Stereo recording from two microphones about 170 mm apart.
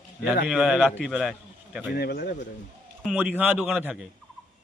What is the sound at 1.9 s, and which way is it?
Speech, 65° left (ahead or behind).